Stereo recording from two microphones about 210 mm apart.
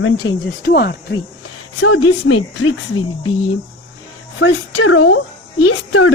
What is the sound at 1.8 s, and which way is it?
Speech, 80° left.